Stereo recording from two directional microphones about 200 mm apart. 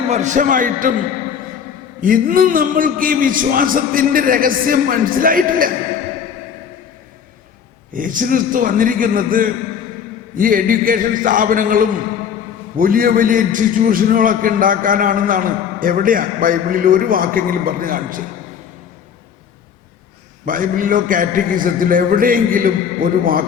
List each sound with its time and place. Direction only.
0.1 s a man's voice: 35° right (ahead or behind)
2.0 s a man's voice: 45° right (ahead or behind)
7.9 s a man's voice: 40° right (ahead or behind)
20.4 s a man's voice: 45° right (ahead or behind)